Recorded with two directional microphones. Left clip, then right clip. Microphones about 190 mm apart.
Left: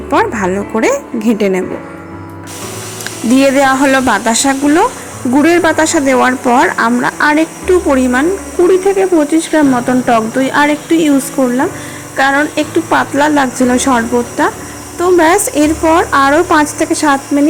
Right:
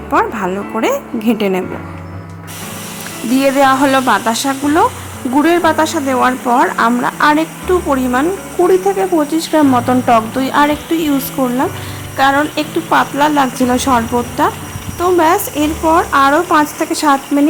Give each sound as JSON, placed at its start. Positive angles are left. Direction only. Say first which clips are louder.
{"t": 0.1, "sound": "speech", "louder": "left 2 dB", "side_deg": 10}
{"t": 3.3, "sound": "speech", "louder": "left 2 dB", "side_deg": 15}